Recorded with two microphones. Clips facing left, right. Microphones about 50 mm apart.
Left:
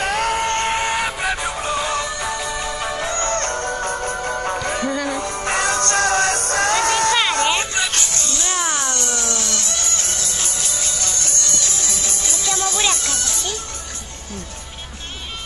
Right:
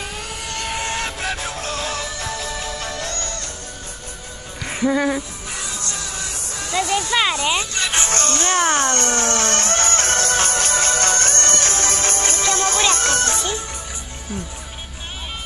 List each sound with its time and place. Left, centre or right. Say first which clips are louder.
0.0 s music: left 11 dB; left
0.7 s music: left 4 dB; centre
3.3 s music: left 10 dB; left
4.7 s music: right 3 dB; centre
5.5 s music: left 13 dB; left
8.1 s music: right 5 dB; right